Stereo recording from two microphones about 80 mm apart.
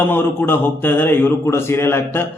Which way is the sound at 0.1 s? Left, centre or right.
Left.